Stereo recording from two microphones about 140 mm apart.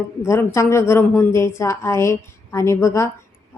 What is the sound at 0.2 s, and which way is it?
A woman's voice, 20° left (ahead or behind).